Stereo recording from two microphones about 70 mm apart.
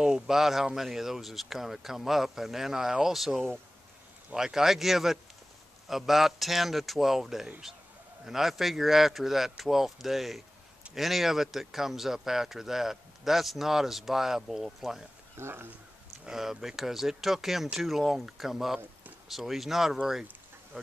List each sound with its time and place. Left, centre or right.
0.0 s speech: centre
15.3 s speech: right
16.3 s speech: centre